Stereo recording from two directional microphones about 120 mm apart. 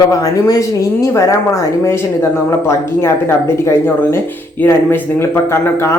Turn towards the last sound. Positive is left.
turn(degrees=20)  # may be behind; listen again after turning